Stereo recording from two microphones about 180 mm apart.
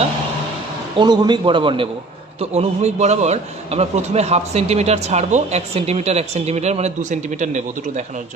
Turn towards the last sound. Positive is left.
turn(degrees=-40)  # may be behind; listen again after turning